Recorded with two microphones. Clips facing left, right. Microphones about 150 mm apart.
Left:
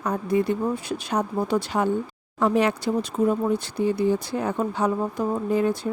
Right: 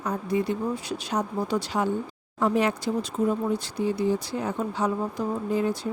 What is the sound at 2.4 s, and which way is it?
Speech, 70° left (ahead or behind).